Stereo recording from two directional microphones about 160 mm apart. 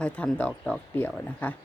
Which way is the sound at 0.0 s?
10° left (ahead or behind).